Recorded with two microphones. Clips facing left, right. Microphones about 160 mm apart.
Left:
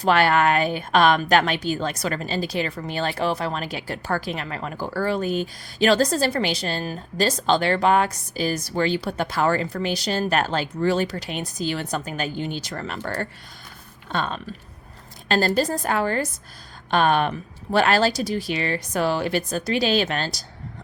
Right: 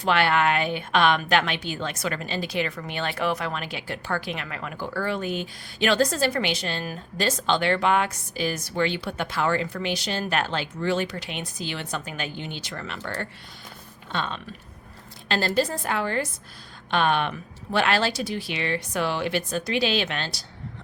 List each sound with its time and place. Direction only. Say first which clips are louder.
0.0 s a woman's voice: left 3 dB; 40° left (ahead or behind)